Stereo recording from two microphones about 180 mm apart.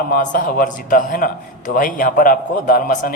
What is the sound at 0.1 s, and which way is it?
A man's voice, 50° left (ahead or behind).